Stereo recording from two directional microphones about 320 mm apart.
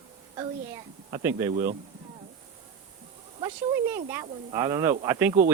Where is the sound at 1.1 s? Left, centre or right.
Centre.